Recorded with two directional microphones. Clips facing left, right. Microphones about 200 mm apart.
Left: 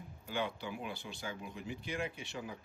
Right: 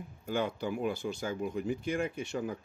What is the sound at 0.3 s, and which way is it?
Speech, 45° right (ahead or behind).